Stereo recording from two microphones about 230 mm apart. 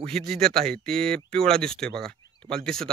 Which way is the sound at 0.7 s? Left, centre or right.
Centre.